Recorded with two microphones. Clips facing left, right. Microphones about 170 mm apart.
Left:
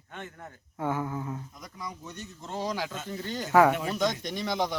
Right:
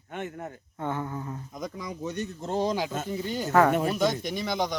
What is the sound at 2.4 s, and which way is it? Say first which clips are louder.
Speech: right 5 dB; 35° right (ahead or behind).